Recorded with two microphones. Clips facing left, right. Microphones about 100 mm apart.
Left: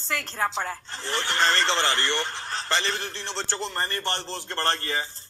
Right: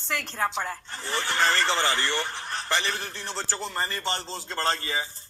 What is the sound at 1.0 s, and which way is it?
A woman's voice, 5° right (ahead or behind).